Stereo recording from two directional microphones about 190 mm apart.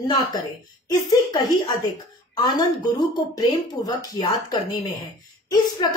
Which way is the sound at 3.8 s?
20° left (ahead or behind).